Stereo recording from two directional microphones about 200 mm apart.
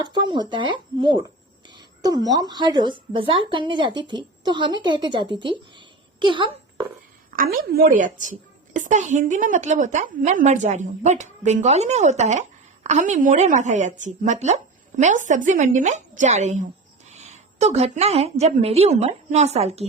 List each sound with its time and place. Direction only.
0.0 s a woman's voice: 20° right (ahead or behind)
7.3 s a woman's voice: 45° right (ahead or behind); by 19.8 s 30° right (ahead or behind)